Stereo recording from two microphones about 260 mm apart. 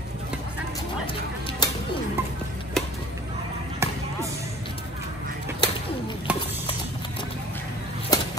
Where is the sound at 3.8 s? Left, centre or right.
Centre.